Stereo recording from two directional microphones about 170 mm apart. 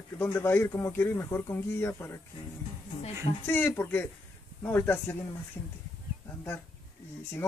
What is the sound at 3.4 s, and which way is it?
Speech, 10° left (ahead or behind).